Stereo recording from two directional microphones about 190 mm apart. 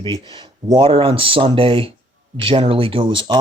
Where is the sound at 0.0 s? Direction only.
25° right (ahead or behind).